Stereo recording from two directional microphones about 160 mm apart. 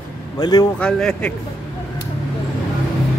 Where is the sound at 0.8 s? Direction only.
5° left (ahead or behind).